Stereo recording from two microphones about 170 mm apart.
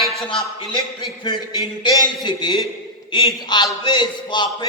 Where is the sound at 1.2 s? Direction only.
25° left (ahead or behind).